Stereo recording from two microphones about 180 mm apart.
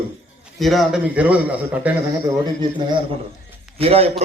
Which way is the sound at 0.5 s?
Centre (ahead or behind).